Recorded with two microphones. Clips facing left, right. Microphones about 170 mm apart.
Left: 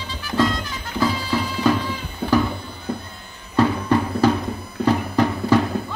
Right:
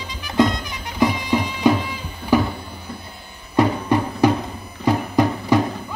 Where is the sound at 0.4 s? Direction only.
15° right (ahead or behind).